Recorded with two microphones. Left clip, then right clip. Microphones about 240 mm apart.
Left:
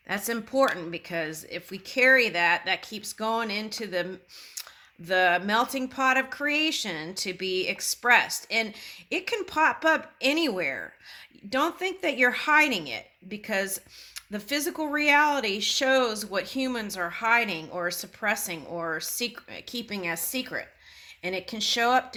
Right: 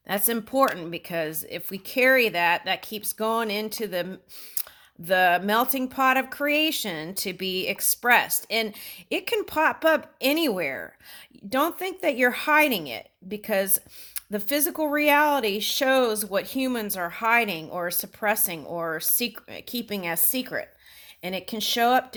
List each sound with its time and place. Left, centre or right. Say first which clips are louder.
0.1 s speech: right 2 dB; right